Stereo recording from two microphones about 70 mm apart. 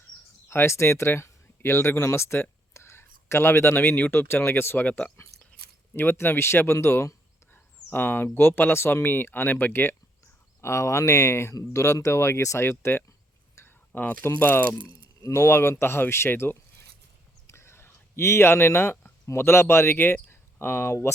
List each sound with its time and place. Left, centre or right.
0.4 s speech: left
4.8 s speech: left
5.9 s speech: left
7.5 s speech: left
10.6 s speech: left
13.6 s a sound: left
13.9 s speech: left
17.4 s a sound: left
19.4 s speech: left
20.3 s a sound: left